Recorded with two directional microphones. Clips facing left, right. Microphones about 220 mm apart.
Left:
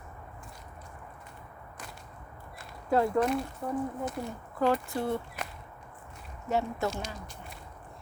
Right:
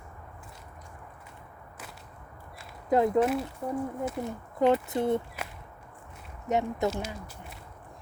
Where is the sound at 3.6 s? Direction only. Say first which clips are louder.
Right 1 dB; 10° right (ahead or behind).